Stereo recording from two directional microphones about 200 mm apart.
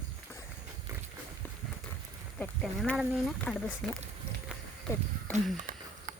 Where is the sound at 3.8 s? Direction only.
Centre (ahead or behind).